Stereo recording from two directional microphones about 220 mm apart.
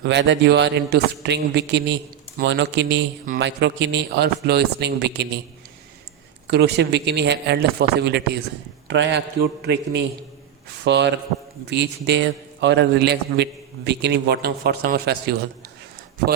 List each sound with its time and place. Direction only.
0.0 s a man's voice: 55° right (ahead or behind)
6.5 s a man's voice: 50° right (ahead or behind)